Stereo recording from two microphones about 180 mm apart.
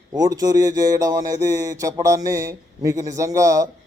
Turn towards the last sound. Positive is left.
turn(degrees=-15)  # may be behind; listen again after turning